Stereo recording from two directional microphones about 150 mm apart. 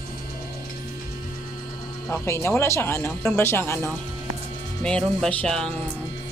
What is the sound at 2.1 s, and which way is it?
Speech, 15° left (ahead or behind).